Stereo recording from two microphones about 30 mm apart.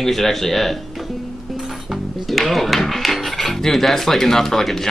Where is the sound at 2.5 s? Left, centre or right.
Centre.